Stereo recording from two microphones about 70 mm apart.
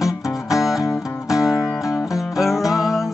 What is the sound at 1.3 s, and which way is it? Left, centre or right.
Music, centre.